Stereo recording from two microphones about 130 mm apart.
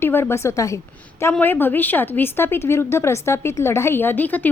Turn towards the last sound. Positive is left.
turn(degrees=15)  # may be behind; listen again after turning